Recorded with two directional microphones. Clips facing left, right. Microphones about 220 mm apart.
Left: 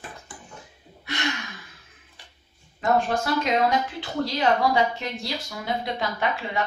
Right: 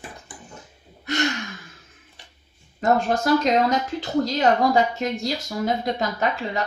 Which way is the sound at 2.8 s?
40° right (ahead or behind).